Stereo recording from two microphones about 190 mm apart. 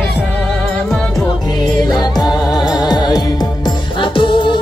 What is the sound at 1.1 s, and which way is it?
Music, 20° left (ahead or behind).